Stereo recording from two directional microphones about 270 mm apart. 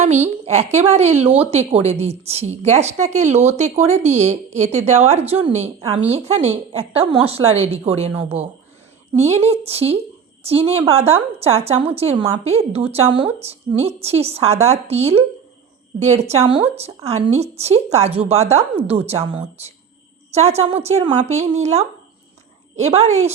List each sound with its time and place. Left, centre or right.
0.0 s a woman's voice: right